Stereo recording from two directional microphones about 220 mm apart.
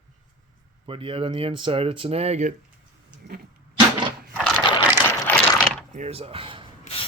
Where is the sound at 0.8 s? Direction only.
25° right (ahead or behind).